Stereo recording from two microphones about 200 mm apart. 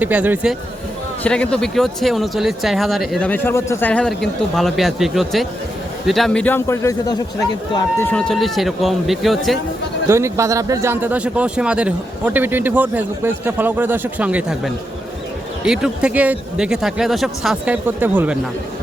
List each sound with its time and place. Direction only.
0.0 s speech: 10° right (ahead or behind)
1.2 s speech: 5° left (ahead or behind)
10.1 s speech: 15° right (ahead or behind)